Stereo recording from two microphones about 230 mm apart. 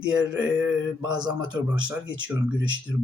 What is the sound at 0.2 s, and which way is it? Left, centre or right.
A man's voice, centre.